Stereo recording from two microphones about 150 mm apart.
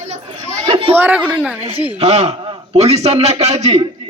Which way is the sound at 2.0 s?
45° right (ahead or behind).